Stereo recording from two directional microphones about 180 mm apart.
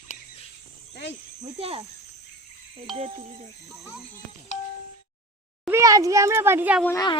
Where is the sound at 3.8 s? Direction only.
5° right (ahead or behind).